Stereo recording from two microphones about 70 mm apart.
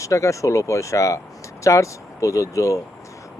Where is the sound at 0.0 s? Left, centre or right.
Left.